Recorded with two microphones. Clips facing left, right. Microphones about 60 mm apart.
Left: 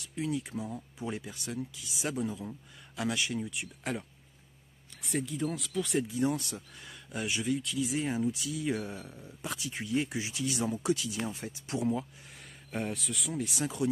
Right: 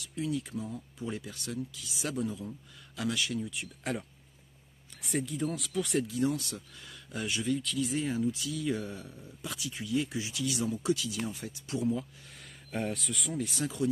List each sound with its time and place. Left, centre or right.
0.0 s speech: left
5.0 s speech: centre
6.0 s speech: left; by 8.1 s centre
8.1 s speech: left
12.7 s speech: centre
13.6 s speech: left